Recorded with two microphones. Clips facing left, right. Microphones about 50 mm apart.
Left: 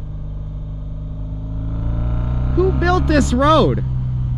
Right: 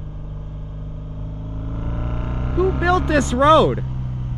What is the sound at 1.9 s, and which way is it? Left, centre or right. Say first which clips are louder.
Music: left 1 dB; right.